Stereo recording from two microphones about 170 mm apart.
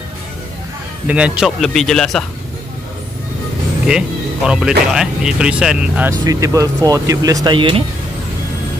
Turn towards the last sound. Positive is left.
turn(degrees=-30)  # may be behind; listen again after turning